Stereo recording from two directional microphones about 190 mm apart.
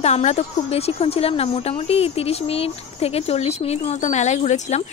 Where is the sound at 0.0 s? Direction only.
35° left (ahead or behind).